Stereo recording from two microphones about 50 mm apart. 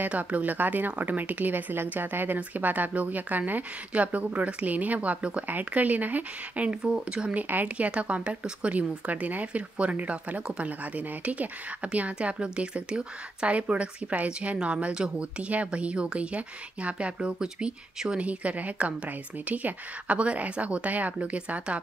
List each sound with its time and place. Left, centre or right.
0.0 s a woman's voice: right
6.6 s a woman's voice: right
7.3 s a woman's voice: right